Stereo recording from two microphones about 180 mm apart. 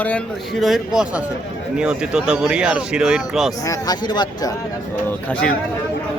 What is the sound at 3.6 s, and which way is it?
Speech, 20° left (ahead or behind).